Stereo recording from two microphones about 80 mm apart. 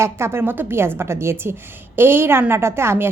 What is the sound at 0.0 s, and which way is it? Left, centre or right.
A woman's voice, right.